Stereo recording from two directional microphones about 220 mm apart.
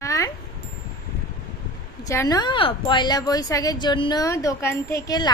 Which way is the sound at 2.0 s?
15° left (ahead or behind).